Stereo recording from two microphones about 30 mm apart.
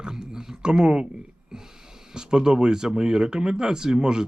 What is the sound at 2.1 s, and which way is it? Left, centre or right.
Speech, right.